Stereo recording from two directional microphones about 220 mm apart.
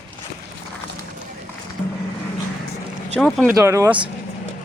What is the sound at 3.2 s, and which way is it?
Speech, centre (ahead or behind).